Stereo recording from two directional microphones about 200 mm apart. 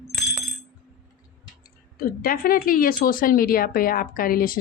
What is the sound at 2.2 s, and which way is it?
Speech, 45° left (ahead or behind).